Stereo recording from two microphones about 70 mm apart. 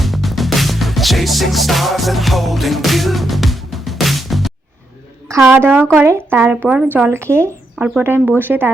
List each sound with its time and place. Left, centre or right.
0.0 s music: centre
5.5 s speech: right